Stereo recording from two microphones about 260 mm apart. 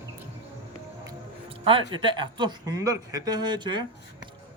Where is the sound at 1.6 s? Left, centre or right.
Centre.